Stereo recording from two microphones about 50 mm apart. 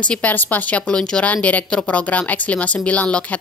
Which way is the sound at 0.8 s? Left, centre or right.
Centre.